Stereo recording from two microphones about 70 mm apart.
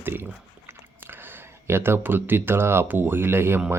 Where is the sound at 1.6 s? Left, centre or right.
Right.